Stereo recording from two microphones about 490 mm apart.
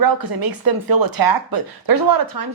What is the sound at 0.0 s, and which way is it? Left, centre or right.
Speech, right.